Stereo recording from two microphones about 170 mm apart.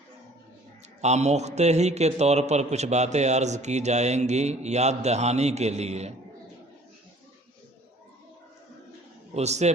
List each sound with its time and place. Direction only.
1.0 s a man's voice: 40° right (ahead or behind)
9.3 s a man's voice: 40° right (ahead or behind)